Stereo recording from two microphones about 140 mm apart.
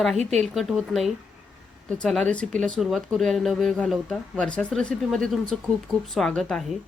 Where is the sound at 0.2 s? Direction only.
50° right (ahead or behind).